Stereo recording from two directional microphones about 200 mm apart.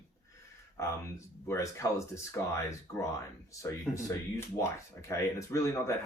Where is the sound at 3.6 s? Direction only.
15° left (ahead or behind).